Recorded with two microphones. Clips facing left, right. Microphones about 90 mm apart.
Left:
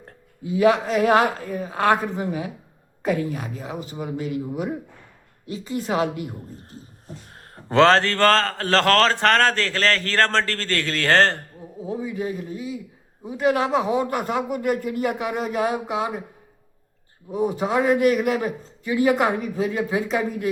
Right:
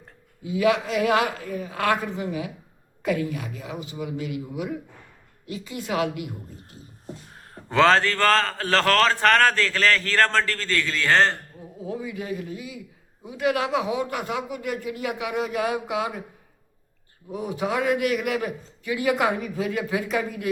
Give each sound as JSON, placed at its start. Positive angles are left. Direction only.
{"t": 0.4, "sound": "a man's voice", "side_deg": 35}
{"t": 11.8, "sound": "a man's voice", "side_deg": 30}
{"t": 17.3, "sound": "a man's voice", "side_deg": 35}